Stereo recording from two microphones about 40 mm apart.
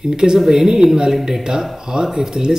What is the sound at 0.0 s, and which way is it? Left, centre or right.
A woman's voice, centre.